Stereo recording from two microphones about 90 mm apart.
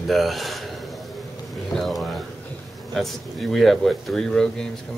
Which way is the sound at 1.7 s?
5° left (ahead or behind).